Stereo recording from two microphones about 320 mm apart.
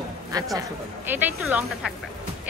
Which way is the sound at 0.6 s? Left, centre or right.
Centre.